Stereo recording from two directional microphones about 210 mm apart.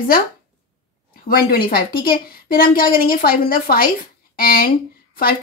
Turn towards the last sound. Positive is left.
turn(degrees=45)  # may be behind; listen again after turning